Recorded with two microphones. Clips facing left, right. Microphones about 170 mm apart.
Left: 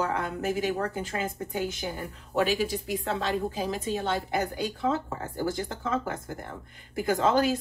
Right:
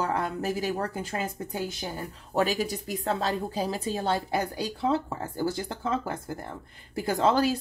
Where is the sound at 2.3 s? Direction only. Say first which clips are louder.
Even; 40° right (ahead or behind).